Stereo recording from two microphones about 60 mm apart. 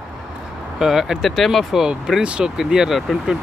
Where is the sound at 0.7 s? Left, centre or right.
Centre.